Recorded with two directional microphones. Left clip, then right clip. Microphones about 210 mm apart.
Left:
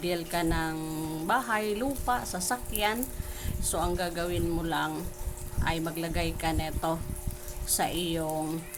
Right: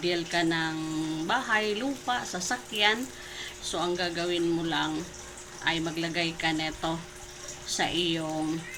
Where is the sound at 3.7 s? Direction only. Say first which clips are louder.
Right 1 dB; 30° left (ahead or behind).